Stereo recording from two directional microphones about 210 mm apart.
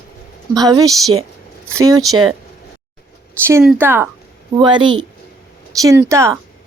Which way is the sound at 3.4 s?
10° right (ahead or behind).